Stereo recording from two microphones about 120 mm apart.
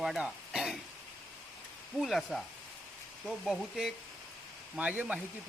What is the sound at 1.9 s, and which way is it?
Speech, centre (ahead or behind).